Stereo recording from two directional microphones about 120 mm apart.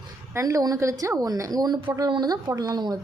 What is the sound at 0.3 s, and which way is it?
A woman's voice, 30° right (ahead or behind).